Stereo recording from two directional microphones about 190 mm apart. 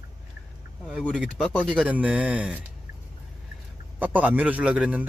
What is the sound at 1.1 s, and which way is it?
Speech, centre (ahead or behind).